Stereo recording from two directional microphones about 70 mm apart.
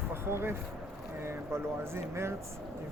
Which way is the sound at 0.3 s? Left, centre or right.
Right.